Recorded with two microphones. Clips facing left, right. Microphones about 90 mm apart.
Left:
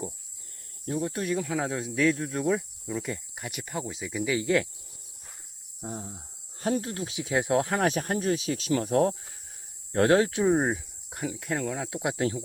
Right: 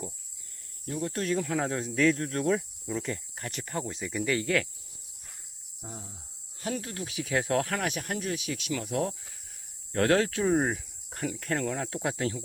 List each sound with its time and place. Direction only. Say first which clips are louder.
0.9 s speech: left 3 dB; 25° left (ahead or behind)
1.1 s speech: even; 5° left (ahead or behind)
4.4 s speech: left 3 dB; 20° left (ahead or behind)
5.8 s speech: left 7 dB; 30° left (ahead or behind)
7.8 s speech: left 6 dB; 35° left (ahead or behind)
9.9 s speech: left 3 dB; 20° left (ahead or behind)
12.1 s speech: left 3 dB; 25° left (ahead or behind)